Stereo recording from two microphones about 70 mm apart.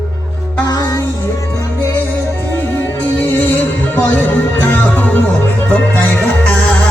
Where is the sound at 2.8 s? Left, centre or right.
Left.